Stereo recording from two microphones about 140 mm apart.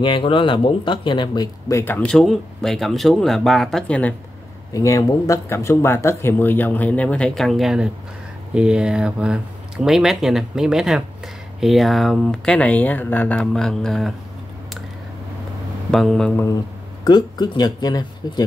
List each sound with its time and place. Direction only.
0.0 s speech: 35° left (ahead or behind); by 4.1 s 10° left (ahead or behind)
4.7 s speech: 25° left (ahead or behind); by 14.1 s 5° left (ahead or behind)
15.9 s speech: centre (ahead or behind)
17.0 s speech: 30° left (ahead or behind)